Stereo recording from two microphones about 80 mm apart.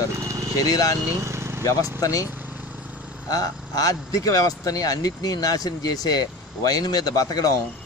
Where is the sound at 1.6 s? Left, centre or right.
Left.